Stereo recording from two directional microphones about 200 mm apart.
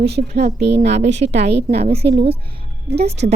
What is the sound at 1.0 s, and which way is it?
Speech, 35° right (ahead or behind).